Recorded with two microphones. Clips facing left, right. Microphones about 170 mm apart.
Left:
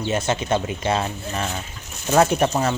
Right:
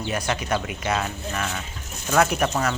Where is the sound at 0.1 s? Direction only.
25° left (ahead or behind).